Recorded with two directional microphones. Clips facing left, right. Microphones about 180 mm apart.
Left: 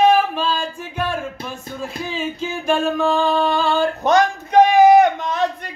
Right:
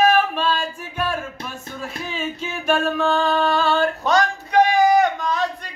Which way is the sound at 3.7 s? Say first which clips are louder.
Left 3 dB; 20° left (ahead or behind).